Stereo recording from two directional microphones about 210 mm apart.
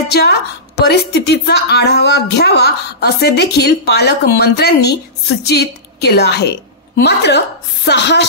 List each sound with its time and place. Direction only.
0.1 s a woman's voice: 50° left (ahead or behind)